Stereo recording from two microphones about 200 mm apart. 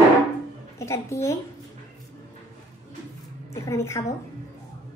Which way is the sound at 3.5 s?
15° left (ahead or behind).